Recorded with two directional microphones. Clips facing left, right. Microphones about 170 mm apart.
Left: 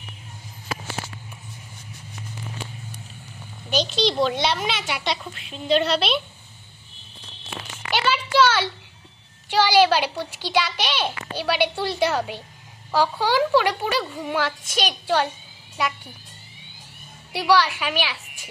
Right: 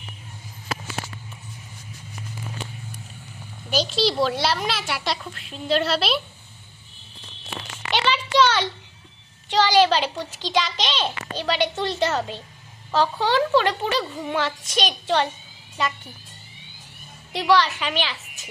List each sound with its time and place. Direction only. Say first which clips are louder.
3.7 s speech: even; 5° right (ahead or behind)
7.9 s a sound: even; 5° left (ahead or behind)
8.4 s a child's voice: even; 5° left (ahead or behind)
17.3 s a child's voice: even; 10° left (ahead or behind)